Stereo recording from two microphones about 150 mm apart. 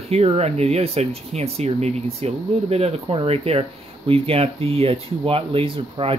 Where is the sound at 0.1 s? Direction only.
45° right (ahead or behind).